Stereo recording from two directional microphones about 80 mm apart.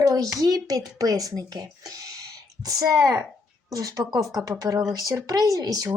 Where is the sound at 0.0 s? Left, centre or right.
Right.